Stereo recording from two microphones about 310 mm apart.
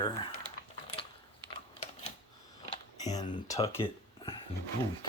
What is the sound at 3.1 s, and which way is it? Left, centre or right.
Speech, centre.